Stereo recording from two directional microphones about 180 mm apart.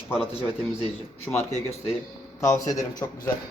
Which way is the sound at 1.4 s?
40° left (ahead or behind).